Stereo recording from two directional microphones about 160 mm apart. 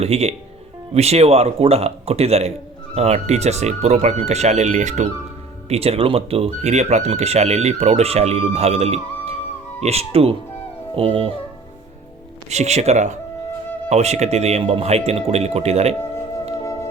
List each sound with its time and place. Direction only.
0.0 s speech: 40° right (ahead or behind)
12.5 s speech: 45° right (ahead or behind)